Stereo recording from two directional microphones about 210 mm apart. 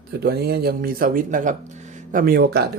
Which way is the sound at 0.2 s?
50° right (ahead or behind).